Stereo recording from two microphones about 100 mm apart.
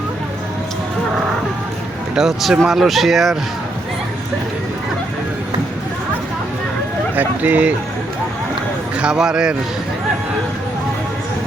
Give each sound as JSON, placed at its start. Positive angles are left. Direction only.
{"t": 2.1, "sound": "speech", "side_deg": -5}
{"t": 7.2, "sound": "speech", "side_deg": -15}
{"t": 9.0, "sound": "speech", "side_deg": -10}